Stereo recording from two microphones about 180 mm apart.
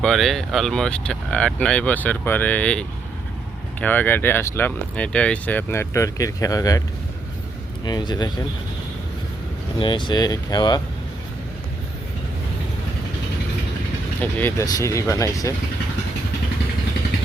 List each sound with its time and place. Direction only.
0.0 s speech: centre (ahead or behind); by 6.8 s 20° left (ahead or behind)
7.9 s speech: 25° left (ahead or behind)
9.7 s speech: 25° left (ahead or behind)
14.2 s speech: 10° left (ahead or behind)